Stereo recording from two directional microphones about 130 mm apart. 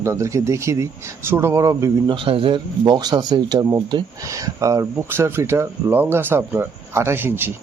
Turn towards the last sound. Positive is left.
turn(degrees=-15)  # may be behind; listen again after turning